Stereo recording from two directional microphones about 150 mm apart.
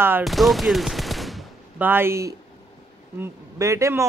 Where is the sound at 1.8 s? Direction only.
15° right (ahead or behind).